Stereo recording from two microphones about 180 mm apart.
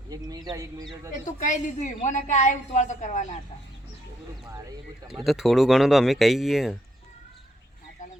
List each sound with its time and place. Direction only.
0.1 s speech: 20° right (ahead or behind)
1.4 s a woman's voice: 40° left (ahead or behind)
5.0 s speech: centre (ahead or behind)